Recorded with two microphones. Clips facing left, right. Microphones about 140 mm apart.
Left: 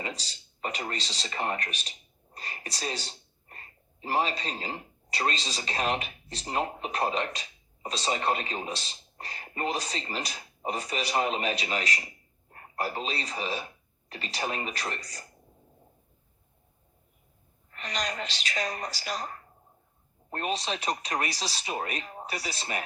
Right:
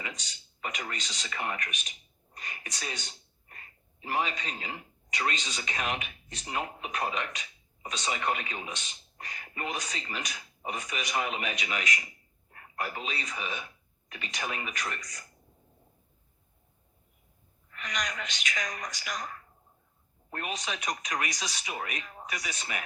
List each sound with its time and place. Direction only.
0.0 s speech: 35° left (ahead or behind)
17.7 s speech: 35° left (ahead or behind)